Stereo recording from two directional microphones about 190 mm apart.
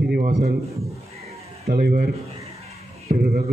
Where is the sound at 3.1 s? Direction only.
55° right (ahead or behind).